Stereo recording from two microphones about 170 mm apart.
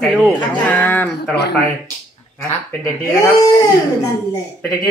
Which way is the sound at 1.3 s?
75° left (ahead or behind).